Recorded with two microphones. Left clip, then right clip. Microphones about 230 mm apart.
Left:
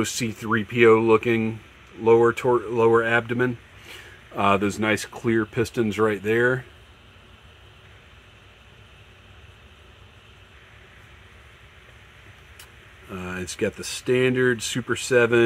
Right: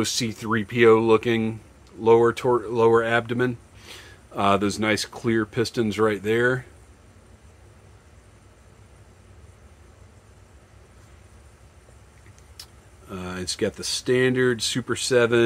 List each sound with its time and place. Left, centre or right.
0.0 s speech: centre
13.1 s speech: centre